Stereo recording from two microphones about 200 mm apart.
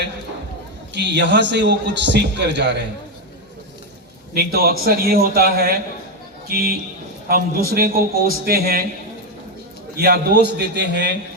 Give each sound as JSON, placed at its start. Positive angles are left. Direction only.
{"t": 0.9, "sound": "a man's voice", "side_deg": -60}
{"t": 4.4, "sound": "a man's voice", "side_deg": -50}
{"t": 10.0, "sound": "a man's voice", "side_deg": -50}